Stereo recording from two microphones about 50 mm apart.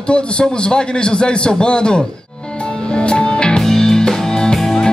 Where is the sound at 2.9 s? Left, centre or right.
Centre.